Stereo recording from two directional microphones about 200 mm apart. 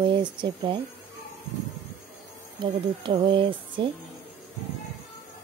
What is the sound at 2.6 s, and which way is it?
Speech, 25° right (ahead or behind).